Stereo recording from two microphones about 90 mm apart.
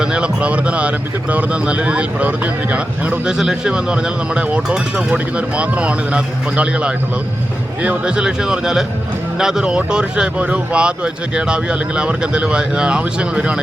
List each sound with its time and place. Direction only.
0.0 s speech: 10° right (ahead or behind)